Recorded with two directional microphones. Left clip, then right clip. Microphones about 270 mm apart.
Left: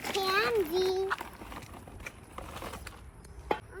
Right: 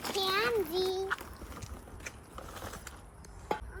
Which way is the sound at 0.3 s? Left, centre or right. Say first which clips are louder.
Left 3 dB; left.